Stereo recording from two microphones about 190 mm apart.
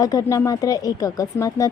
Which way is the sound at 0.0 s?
20° left (ahead or behind).